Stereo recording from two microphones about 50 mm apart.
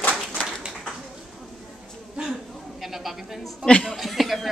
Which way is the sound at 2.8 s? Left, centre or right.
Centre.